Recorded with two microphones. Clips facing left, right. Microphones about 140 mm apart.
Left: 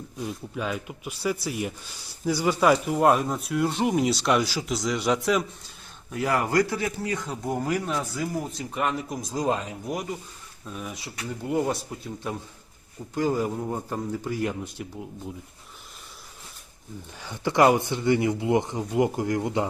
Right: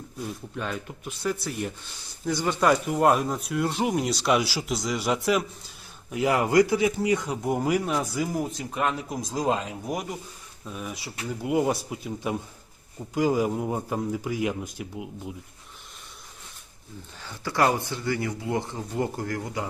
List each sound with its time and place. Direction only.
0.2 s speech: 5° left (ahead or behind)
6.1 s speech: 15° right (ahead or behind)
10.7 s speech: centre (ahead or behind)
17.2 s speech: 15° left (ahead or behind)